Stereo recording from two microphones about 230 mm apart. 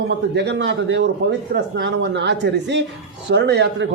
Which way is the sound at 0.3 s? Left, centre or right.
Right.